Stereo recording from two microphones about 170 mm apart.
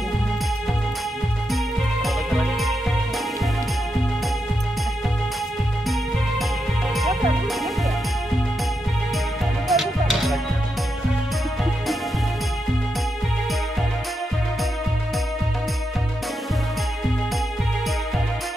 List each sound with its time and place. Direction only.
2.0 s music: centre (ahead or behind)
9.7 s music: centre (ahead or behind)